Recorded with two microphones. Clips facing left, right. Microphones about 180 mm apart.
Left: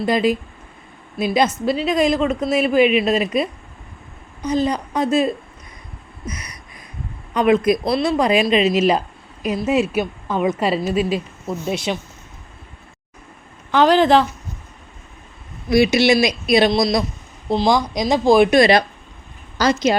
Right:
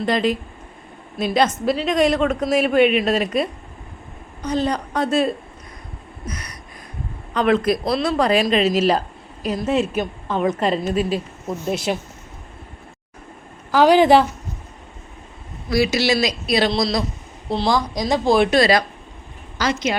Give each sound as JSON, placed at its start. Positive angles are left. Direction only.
{"t": 0.0, "sound": "a woman's voice", "side_deg": 10}
{"t": 7.3, "sound": "a woman's voice", "side_deg": 10}
{"t": 13.7, "sound": "speech", "side_deg": -10}
{"t": 15.7, "sound": "a man's voice", "side_deg": 20}
{"t": 19.5, "sound": "speech", "side_deg": 35}